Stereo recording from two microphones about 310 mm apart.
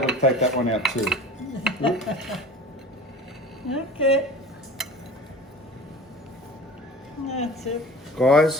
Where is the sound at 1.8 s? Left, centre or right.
Centre.